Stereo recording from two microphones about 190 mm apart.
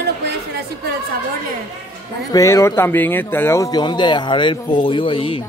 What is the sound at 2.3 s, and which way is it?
Speech, 15° left (ahead or behind).